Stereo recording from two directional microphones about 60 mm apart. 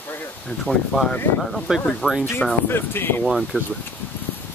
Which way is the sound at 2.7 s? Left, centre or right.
Left.